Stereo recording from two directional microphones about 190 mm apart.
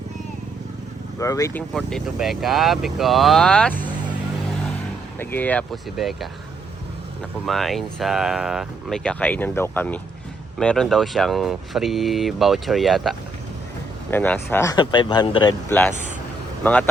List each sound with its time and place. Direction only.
1.2 s speech: 15° left (ahead or behind)
1.7 s speech: centre (ahead or behind)
5.2 s speech: 10° left (ahead or behind)
7.4 s speech: centre (ahead or behind)
14.1 s speech: 10° left (ahead or behind)
15.7 s speech: 10° left (ahead or behind)